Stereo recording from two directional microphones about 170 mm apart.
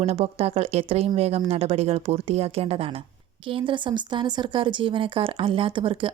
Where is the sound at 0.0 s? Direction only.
35° right (ahead or behind).